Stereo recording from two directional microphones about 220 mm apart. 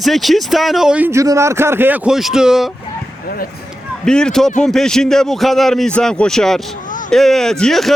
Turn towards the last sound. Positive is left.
turn(degrees=0)  # may be behind; listen again after turning